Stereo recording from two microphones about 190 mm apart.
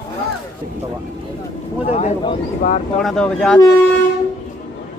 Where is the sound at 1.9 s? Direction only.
35° left (ahead or behind).